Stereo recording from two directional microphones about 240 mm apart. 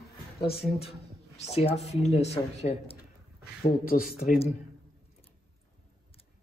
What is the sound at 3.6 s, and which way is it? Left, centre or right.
Speech, left.